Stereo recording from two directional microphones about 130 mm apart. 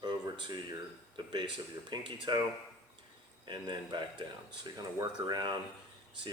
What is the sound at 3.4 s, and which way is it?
Speech, 35° right (ahead or behind).